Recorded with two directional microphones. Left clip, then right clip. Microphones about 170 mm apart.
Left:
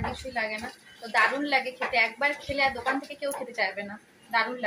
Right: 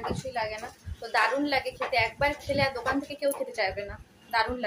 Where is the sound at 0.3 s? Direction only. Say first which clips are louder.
Left 1 dB; 20° right (ahead or behind).